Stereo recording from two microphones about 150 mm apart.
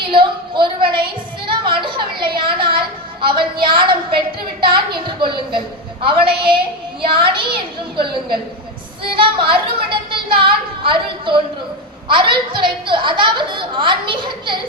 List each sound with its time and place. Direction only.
0.1 s a sound: 35° right (ahead or behind)
5.5 s a woman's voice: 35° right (ahead or behind)
9.1 s a woman's voice: 35° right (ahead or behind)